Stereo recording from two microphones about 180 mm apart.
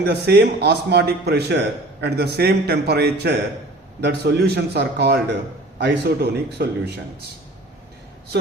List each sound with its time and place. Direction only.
0.0 s a man's voice: 65° right (ahead or behind)